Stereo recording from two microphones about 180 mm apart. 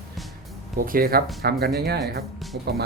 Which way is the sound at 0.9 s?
55° right (ahead or behind).